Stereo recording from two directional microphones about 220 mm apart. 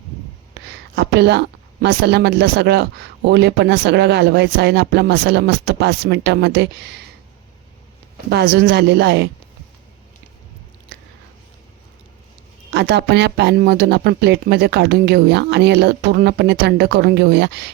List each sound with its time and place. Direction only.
0.9 s speech: 50° right (ahead or behind)
8.3 s speech: 50° right (ahead or behind)
12.7 s speech: 50° right (ahead or behind)